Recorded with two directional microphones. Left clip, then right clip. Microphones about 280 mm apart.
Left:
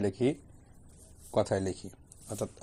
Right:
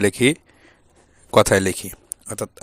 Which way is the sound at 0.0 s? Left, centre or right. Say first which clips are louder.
Right 12 dB; right.